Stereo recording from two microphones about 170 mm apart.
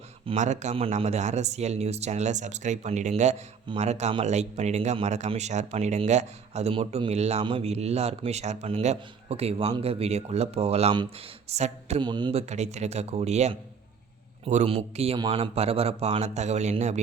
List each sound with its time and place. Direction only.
0.3 s speech: 45° right (ahead or behind)
12.0 s speech: 25° right (ahead or behind)
12.3 s speech: 40° right (ahead or behind)